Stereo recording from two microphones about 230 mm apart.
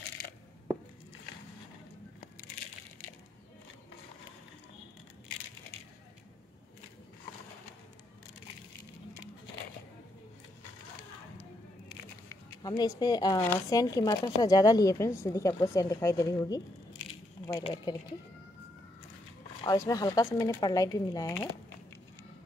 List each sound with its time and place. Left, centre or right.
12.3 s speech: centre
19.6 s speech: centre